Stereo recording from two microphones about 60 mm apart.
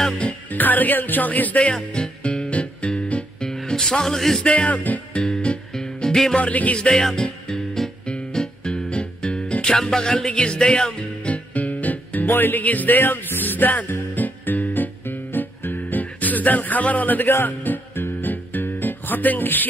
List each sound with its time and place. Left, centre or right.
0.5 s music: left; by 4.4 s centre
4.4 s music: left
6.3 s music: left
6.9 s music: centre
11.0 s music: left